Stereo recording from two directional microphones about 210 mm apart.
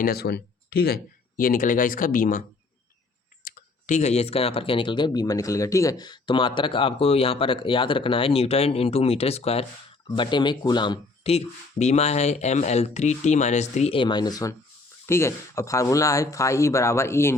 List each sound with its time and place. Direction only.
0.0 s speech: 50° left (ahead or behind)
3.4 s speech: 35° left (ahead or behind); by 17.3 s 10° left (ahead or behind)